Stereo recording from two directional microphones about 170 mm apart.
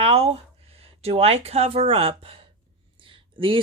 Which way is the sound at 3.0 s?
30° right (ahead or behind).